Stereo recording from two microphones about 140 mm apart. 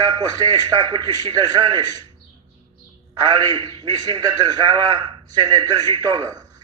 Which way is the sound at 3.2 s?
30° right (ahead or behind).